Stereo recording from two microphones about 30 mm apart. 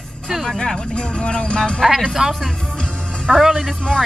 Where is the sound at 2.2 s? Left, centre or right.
Right.